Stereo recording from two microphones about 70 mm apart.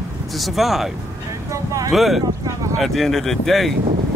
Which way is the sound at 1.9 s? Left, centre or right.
Centre.